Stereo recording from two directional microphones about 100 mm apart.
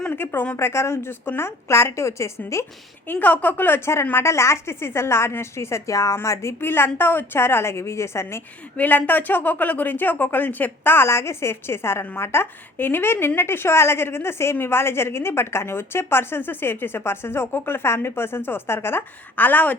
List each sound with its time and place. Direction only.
0.1 s speech: 20° left (ahead or behind)
3.1 s speech: 15° left (ahead or behind)
8.7 s speech: 15° left (ahead or behind)